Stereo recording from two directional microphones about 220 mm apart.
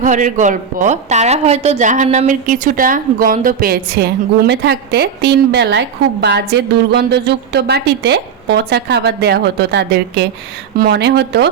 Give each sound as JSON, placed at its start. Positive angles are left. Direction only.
{"t": 0.0, "sound": "a woman's voice", "side_deg": -35}